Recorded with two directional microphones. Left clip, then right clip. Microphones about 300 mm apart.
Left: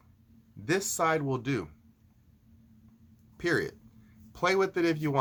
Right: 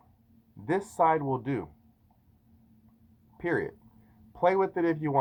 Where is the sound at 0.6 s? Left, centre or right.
Centre.